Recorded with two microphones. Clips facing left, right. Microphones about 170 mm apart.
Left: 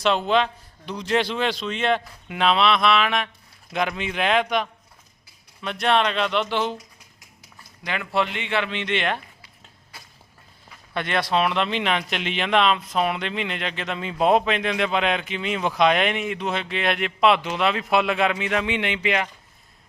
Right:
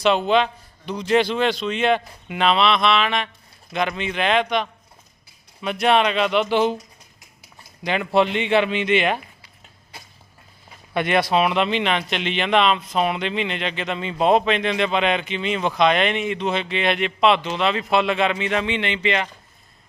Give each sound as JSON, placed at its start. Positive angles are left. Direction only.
{"t": 0.0, "sound": "speech", "side_deg": 0}
{"t": 5.6, "sound": "speech", "side_deg": -10}
{"t": 7.9, "sound": "speech", "side_deg": -20}
{"t": 10.9, "sound": "speech", "side_deg": -15}